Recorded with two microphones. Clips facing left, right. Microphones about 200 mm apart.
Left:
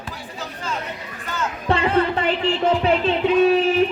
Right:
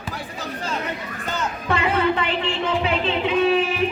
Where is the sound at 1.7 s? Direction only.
35° left (ahead or behind).